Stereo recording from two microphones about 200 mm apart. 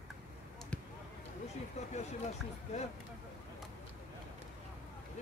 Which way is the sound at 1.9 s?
35° left (ahead or behind).